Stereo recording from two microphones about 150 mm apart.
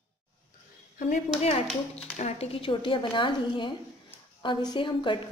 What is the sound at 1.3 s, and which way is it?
Speech, 45° left (ahead or behind).